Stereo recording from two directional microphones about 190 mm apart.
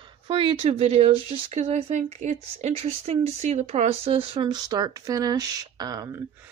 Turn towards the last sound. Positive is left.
turn(degrees=-20)  # may be behind; listen again after turning